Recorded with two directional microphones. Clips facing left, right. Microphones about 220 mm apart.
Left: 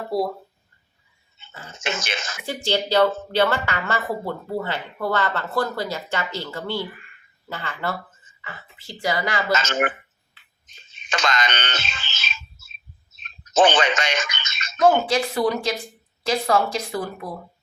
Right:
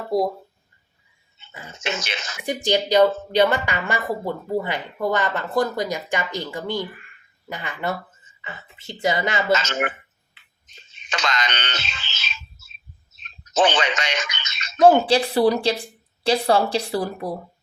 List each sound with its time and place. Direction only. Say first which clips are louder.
1.8 s speech: even; 50° left (ahead or behind)
2.4 s speech: right 3 dB; 15° right (ahead or behind)
11.1 s speech: left 2 dB; 50° left (ahead or behind)
13.5 s speech: left 2 dB; 50° left (ahead or behind)
14.8 s a woman's voice: right 3 dB; 30° right (ahead or behind)